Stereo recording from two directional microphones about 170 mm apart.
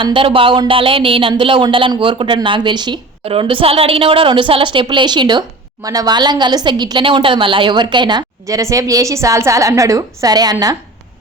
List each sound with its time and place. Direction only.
0.0 s speech: 30° right (ahead or behind)